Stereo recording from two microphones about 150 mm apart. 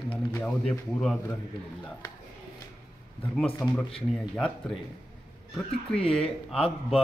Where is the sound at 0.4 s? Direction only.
5° left (ahead or behind).